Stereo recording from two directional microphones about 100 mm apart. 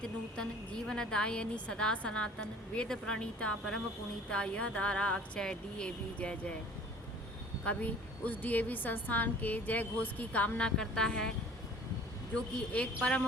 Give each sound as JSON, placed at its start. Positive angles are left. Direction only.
{"t": 0.0, "sound": "a woman's voice", "side_deg": 10}
{"t": 7.6, "sound": "a woman's voice", "side_deg": 15}
{"t": 12.3, "sound": "a woman's voice", "side_deg": 10}